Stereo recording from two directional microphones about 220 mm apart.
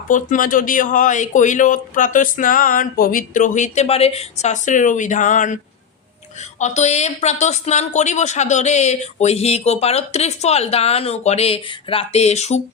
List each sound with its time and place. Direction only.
0.1 s speech: 35° left (ahead or behind)
6.6 s speech: 30° left (ahead or behind)